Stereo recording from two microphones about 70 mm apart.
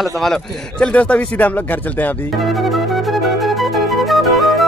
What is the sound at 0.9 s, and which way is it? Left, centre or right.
Speech, centre.